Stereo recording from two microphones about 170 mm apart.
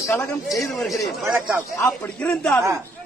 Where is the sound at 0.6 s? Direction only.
Centre (ahead or behind).